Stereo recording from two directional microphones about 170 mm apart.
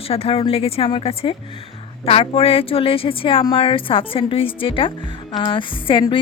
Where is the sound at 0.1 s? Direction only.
35° left (ahead or behind).